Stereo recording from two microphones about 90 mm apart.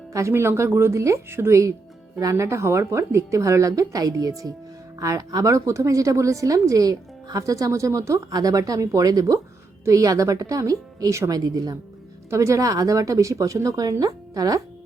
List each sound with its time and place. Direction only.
0.1 s a woman's voice: 35° right (ahead or behind)